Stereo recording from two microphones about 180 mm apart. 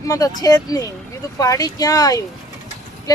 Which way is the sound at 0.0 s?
20° left (ahead or behind).